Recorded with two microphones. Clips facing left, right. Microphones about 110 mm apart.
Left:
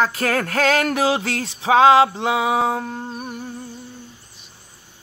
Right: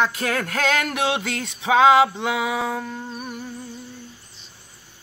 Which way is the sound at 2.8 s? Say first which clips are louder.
Left 2 dB; 40° left (ahead or behind).